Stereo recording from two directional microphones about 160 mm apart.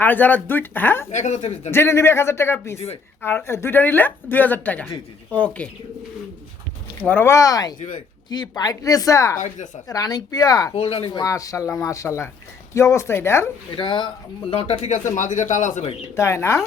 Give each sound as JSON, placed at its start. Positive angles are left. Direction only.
{"t": 0.0, "sound": "speech", "side_deg": 10}
{"t": 1.1, "sound": "speech", "side_deg": 45}
{"t": 1.7, "sound": "speech", "side_deg": 15}
{"t": 7.0, "sound": "speech", "side_deg": 10}
{"t": 7.8, "sound": "speech", "side_deg": 55}
{"t": 8.3, "sound": "speech", "side_deg": 25}
{"t": 10.8, "sound": "speech", "side_deg": 40}
{"t": 11.2, "sound": "speech", "side_deg": 20}
{"t": 13.7, "sound": "speech", "side_deg": 30}
{"t": 16.1, "sound": "speech", "side_deg": 15}